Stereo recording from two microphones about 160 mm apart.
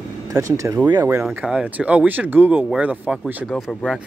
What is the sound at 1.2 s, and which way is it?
Speech, 5° right (ahead or behind).